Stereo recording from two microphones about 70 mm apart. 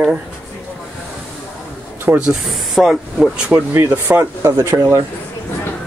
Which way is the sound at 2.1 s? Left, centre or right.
Right.